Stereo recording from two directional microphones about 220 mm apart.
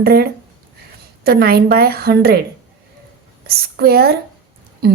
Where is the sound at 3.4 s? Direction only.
45° right (ahead or behind).